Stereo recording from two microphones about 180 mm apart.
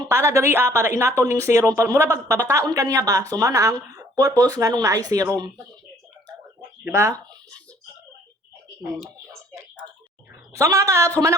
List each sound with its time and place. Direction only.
0.1 s speech: 15° right (ahead or behind)
6.8 s speech: 15° right (ahead or behind)
10.5 s speech: 15° right (ahead or behind)